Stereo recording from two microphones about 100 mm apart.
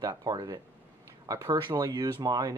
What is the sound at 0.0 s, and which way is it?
Speech, 40° right (ahead or behind).